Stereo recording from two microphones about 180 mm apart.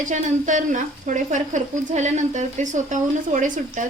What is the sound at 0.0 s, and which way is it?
Speech, 45° right (ahead or behind).